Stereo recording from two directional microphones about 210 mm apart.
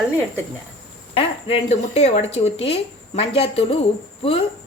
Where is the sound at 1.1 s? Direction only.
25° left (ahead or behind).